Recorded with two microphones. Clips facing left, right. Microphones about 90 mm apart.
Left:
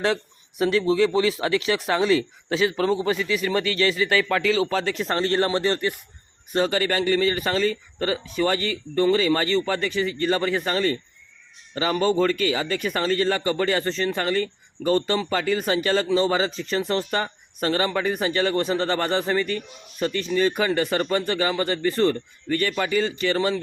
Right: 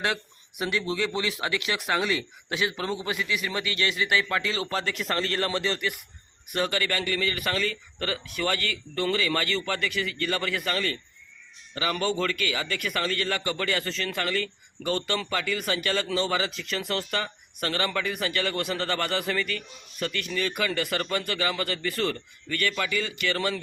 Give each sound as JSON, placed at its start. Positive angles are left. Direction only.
{"t": 0.6, "sound": "a man's voice", "side_deg": 30}